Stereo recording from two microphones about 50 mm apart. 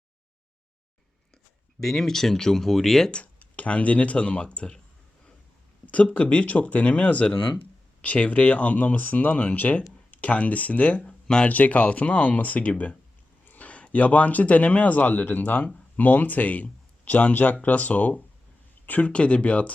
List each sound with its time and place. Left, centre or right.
1.8 s speech: centre
3.3 s speech: left
5.9 s speech: left
11.4 s speech: left